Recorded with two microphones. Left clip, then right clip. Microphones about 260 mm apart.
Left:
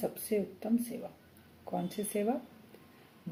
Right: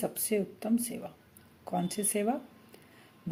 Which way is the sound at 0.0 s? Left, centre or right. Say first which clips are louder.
Right 2 dB; right.